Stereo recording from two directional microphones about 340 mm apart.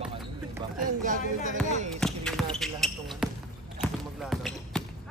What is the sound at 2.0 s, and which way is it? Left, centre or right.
Basketball bounce, centre.